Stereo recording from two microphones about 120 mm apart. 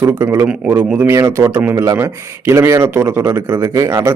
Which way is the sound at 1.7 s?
25° right (ahead or behind).